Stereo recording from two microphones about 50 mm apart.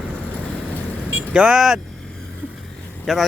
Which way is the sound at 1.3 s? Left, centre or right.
Centre.